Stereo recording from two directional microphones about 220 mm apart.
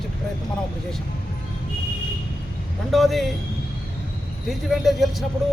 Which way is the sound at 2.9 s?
Centre (ahead or behind).